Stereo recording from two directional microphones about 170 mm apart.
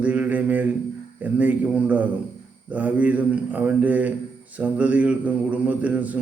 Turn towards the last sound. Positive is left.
turn(degrees=-10)  # may be behind; listen again after turning